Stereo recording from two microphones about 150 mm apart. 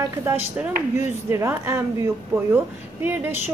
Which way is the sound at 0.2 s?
15° right (ahead or behind).